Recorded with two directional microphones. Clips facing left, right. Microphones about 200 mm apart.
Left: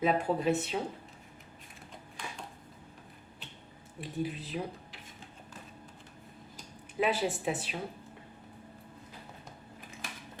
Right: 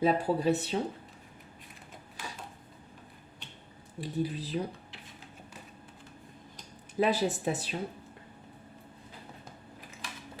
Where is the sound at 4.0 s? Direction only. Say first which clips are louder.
Right 3 dB; 35° right (ahead or behind).